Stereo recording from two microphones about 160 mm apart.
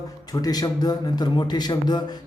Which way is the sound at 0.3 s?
25° left (ahead or behind).